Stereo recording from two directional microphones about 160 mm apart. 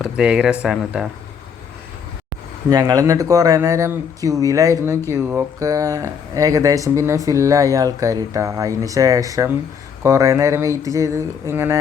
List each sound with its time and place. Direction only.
0.0 s speech: 5° right (ahead or behind)
2.6 s speech: 25° right (ahead or behind)